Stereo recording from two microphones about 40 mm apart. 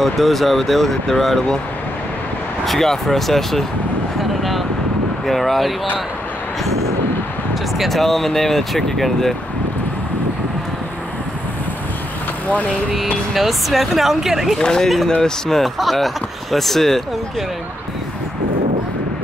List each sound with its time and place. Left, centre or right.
0.0 s speech: centre
2.6 s speech: centre
4.2 s vehicle: centre
5.2 s speech: centre
7.8 s speech: centre
12.9 s speech: centre
14.6 s speech: centre
15.6 s speech: centre